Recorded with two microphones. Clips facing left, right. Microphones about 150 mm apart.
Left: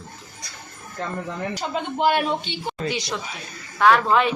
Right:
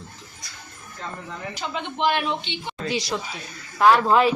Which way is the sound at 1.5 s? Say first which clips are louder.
Left 1 dB; 40° left (ahead or behind).